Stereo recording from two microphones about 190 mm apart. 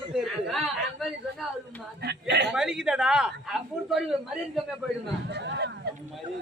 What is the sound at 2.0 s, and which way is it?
Speech, 60° right (ahead or behind).